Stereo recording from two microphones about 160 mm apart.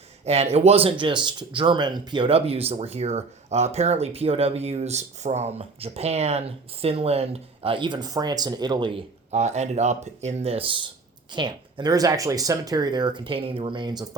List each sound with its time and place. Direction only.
0.3 s speech: 40° right (ahead or behind); by 14.2 s 25° right (ahead or behind)